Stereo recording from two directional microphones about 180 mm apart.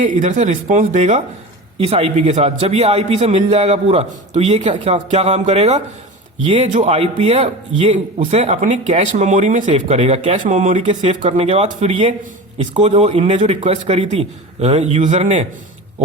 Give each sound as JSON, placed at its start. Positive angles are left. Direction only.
{"t": 0.0, "sound": "a man's voice", "side_deg": -45}
{"t": 10.5, "sound": "a man's voice", "side_deg": -45}